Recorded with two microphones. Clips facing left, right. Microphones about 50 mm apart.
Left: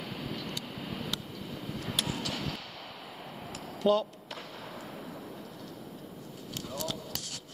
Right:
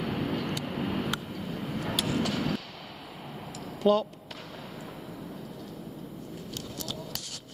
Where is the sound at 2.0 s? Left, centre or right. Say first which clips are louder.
Right 7 dB; right.